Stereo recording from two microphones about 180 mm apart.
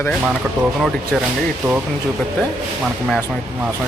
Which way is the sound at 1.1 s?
5° left (ahead or behind).